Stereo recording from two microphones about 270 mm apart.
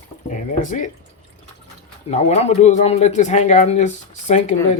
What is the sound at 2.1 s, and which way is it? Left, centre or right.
Speech, left.